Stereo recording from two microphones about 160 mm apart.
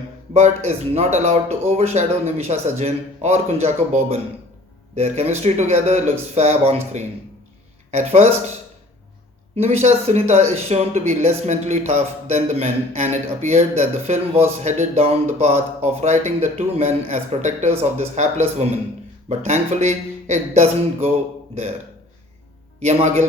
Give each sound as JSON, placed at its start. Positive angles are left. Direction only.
{"t": 0.3, "sound": "a man's voice", "side_deg": -45}
{"t": 9.6, "sound": "a man's voice", "side_deg": -45}
{"t": 19.3, "sound": "a man's voice", "side_deg": -45}
{"t": 22.8, "sound": "a man's voice", "side_deg": -45}